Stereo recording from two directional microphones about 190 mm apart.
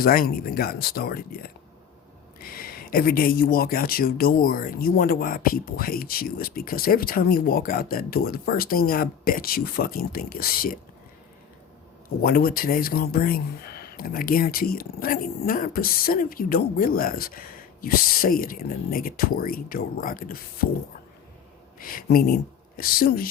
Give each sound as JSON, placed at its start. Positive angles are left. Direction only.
{"t": 0.0, "sound": "speech", "side_deg": 50}
{"t": 12.2, "sound": "speech", "side_deg": 50}
{"t": 21.8, "sound": "speech", "side_deg": 50}